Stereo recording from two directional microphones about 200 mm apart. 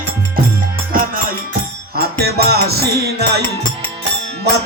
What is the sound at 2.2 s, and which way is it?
Music, 50° right (ahead or behind).